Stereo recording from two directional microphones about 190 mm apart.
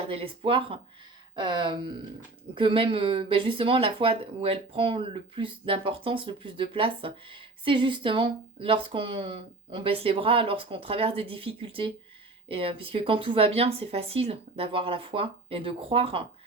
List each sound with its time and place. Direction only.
0.1 s speech: 30° right (ahead or behind)